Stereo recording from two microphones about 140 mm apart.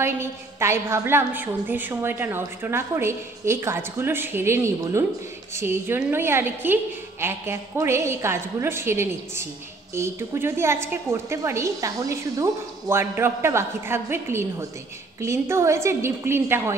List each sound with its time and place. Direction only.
0.0 s a woman's voice: 20° right (ahead or behind)